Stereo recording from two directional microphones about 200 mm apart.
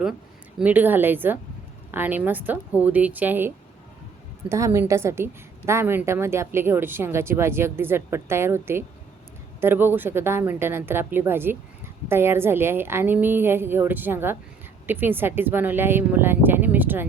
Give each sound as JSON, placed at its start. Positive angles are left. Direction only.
{"t": 0.6, "sound": "a woman's voice", "side_deg": -10}